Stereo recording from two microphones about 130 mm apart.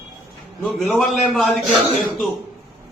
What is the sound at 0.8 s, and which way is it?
Speech, centre (ahead or behind).